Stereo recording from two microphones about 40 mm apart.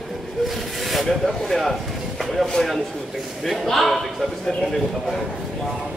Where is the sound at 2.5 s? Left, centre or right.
Centre.